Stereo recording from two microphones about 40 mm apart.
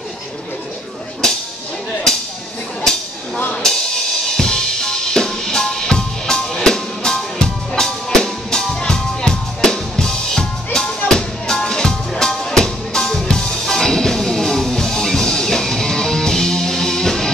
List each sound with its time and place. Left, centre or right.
1.2 s whip: centre
2.1 s a sound: centre
3.6 s drum kit: centre
12.3 s music: centre